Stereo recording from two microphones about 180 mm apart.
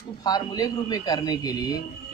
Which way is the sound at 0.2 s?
20° left (ahead or behind).